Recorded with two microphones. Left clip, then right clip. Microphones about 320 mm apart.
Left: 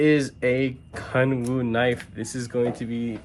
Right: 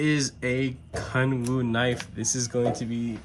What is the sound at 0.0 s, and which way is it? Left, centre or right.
Speech, centre.